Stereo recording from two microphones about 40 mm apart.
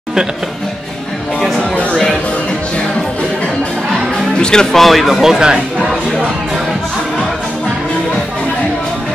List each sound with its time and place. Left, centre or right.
4.4 s speech: centre
4.7 s speech: centre
5.2 s speech: centre